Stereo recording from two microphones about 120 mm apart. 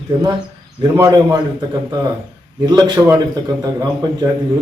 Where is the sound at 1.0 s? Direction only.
40° right (ahead or behind).